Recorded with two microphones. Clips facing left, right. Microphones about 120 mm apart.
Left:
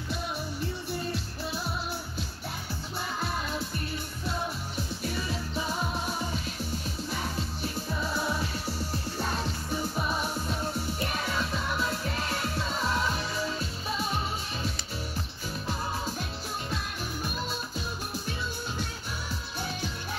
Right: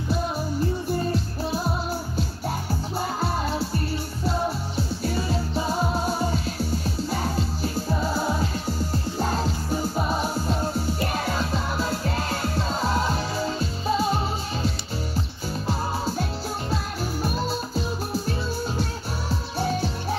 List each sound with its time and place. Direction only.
0.8 s music: 40° right (ahead or behind)
2.7 s music: 35° right (ahead or behind)